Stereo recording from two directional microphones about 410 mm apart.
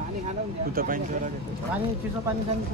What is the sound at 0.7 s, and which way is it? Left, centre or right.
Speech, right.